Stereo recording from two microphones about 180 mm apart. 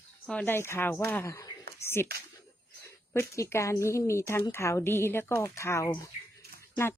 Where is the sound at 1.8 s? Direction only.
15° left (ahead or behind).